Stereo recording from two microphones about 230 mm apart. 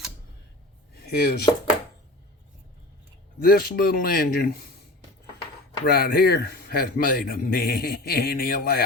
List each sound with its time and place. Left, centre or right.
1.0 s speech: left
3.4 s a man's voice: left
5.8 s a man's voice: left